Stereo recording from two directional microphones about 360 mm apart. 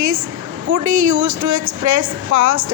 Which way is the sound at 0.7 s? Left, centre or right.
Right.